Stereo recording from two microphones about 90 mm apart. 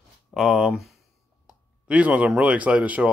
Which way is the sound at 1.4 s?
15° right (ahead or behind).